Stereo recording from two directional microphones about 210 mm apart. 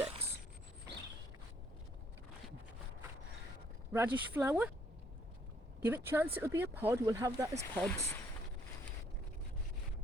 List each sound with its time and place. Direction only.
3.9 s speech: 10° right (ahead or behind)
5.8 s speech: 10° right (ahead or behind)
7.8 s speech: 5° left (ahead or behind)